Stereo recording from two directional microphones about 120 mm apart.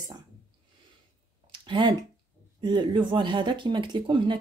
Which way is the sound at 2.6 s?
40° right (ahead or behind).